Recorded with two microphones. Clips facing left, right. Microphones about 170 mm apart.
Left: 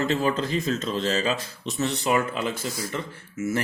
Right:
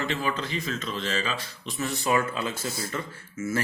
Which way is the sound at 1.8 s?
15° left (ahead or behind).